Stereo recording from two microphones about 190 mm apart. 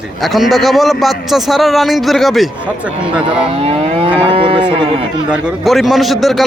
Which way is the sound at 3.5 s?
30° right (ahead or behind).